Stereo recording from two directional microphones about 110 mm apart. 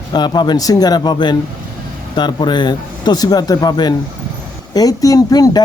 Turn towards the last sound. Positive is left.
turn(degrees=35)  # may be behind; listen again after turning